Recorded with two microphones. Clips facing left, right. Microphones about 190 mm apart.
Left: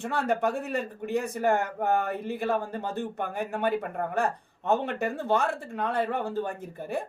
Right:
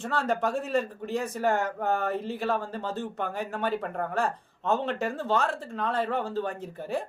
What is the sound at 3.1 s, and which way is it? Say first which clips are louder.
Speech: even; 55° left (ahead or behind).